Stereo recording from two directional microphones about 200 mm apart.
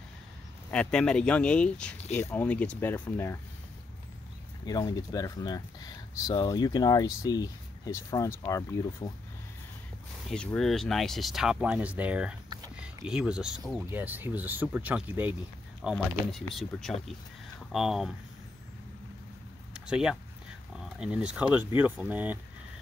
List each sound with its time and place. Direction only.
0.7 s speech: 5° left (ahead or behind)
4.6 s speech: 15° left (ahead or behind)
10.3 s speech: 5° left (ahead or behind)
19.7 s a sound: 5° right (ahead or behind)
20.7 s speech: 5° right (ahead or behind)